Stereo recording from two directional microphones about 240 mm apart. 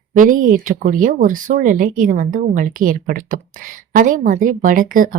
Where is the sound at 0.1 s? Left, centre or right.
Right.